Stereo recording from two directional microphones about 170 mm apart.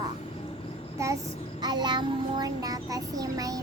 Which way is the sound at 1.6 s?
25° right (ahead or behind).